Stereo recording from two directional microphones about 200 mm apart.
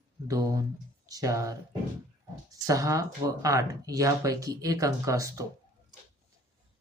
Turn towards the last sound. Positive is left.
turn(degrees=-15)  # may be behind; listen again after turning